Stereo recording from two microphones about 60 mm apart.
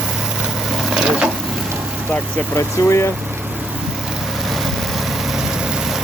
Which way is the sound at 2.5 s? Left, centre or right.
Left.